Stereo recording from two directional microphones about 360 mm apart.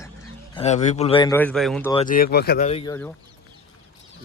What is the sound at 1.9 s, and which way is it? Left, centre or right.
Speech, centre.